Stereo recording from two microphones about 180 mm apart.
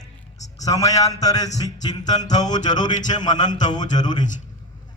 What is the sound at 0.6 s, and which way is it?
A man's voice, 20° left (ahead or behind).